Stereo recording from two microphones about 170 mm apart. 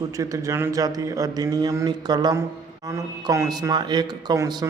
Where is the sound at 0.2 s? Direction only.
20° right (ahead or behind).